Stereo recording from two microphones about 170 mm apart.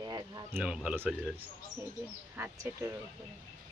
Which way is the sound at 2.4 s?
15° right (ahead or behind).